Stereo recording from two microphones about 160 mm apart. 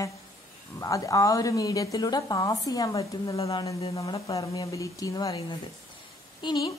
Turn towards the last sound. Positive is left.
turn(degrees=25)  # may be behind; listen again after turning